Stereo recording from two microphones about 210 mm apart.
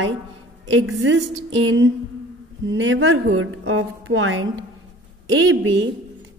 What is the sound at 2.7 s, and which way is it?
A woman's voice, 65° right (ahead or behind).